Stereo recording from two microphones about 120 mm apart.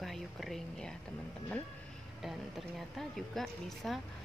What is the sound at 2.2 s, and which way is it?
A woman's voice, centre (ahead or behind).